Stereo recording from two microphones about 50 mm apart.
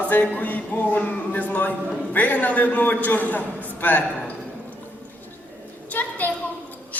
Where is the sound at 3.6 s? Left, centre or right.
Left.